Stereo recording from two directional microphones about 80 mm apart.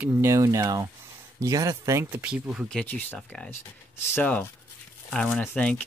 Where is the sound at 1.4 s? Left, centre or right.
Right.